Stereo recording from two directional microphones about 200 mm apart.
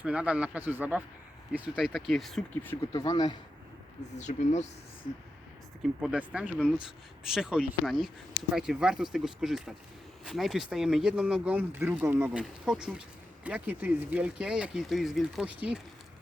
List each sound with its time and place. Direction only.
0.0 s speech: 5° right (ahead or behind)
2.9 s speech: 20° left (ahead or behind)
4.2 s speech: 35° left (ahead or behind)
5.8 s speech: 5° right (ahead or behind)